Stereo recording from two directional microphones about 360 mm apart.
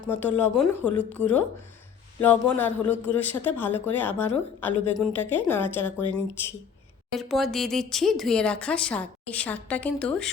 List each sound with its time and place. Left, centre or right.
0.1 s a man's voice: centre
7.2 s a man's voice: centre